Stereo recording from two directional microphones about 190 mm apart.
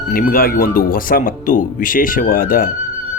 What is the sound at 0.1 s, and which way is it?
Speech, 50° left (ahead or behind).